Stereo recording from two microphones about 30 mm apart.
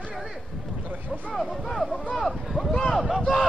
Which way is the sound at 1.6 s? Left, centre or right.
Centre.